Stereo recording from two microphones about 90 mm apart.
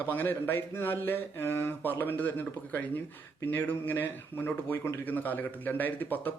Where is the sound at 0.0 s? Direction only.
20° left (ahead or behind).